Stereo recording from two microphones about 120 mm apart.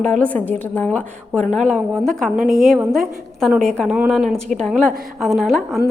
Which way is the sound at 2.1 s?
Centre (ahead or behind).